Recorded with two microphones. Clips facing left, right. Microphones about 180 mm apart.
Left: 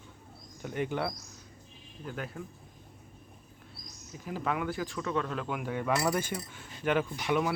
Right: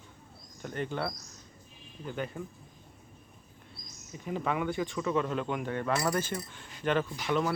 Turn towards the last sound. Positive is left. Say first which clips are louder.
# even
turn(degrees=10)  # may be behind; listen again after turning